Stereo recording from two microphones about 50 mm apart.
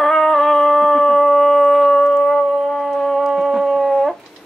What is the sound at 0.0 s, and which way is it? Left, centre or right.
Howl, centre.